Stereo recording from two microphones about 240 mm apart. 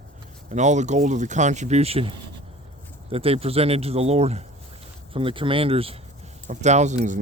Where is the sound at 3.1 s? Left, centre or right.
Right.